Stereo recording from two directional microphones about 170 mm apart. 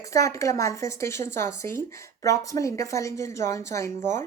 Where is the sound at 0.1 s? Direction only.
20° left (ahead or behind).